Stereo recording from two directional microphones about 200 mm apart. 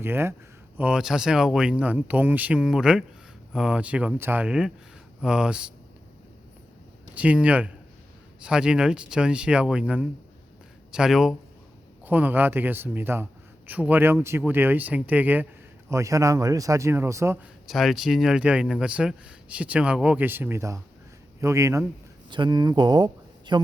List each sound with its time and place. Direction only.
0.0 s speech: 10° right (ahead or behind)
7.1 s speech: 5° right (ahead or behind)
17.7 s speech: centre (ahead or behind); by 23.6 s 20° right (ahead or behind)